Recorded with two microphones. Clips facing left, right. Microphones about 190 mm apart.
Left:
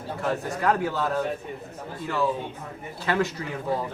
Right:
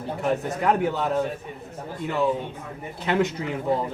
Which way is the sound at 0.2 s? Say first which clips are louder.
Right 2 dB; 20° right (ahead or behind).